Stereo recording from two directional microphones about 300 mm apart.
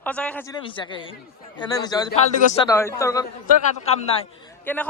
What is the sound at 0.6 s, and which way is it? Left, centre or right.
Speech, centre.